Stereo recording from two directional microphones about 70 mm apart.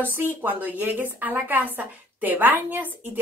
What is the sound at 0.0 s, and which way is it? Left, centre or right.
A woman's voice, right.